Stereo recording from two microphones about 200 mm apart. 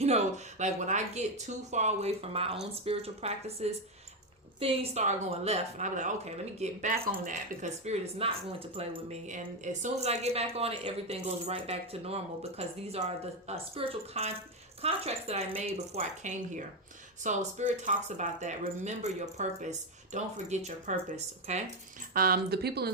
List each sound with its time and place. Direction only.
0.6 s a woman's voice: 35° right (ahead or behind)
6.9 s a woman's voice: 45° right (ahead or behind)
22.1 s a woman's voice: 45° right (ahead or behind)